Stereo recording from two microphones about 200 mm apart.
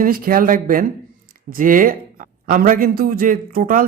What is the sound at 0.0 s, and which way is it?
A man's voice, 45° right (ahead or behind).